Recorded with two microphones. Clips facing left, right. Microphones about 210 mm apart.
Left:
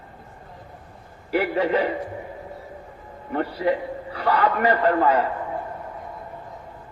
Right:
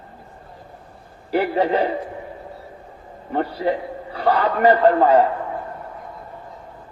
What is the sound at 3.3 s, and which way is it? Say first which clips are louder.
A man's voice: right 1 dB; 30° right (ahead or behind).